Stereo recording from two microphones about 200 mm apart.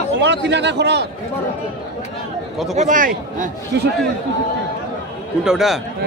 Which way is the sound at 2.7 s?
40° right (ahead or behind).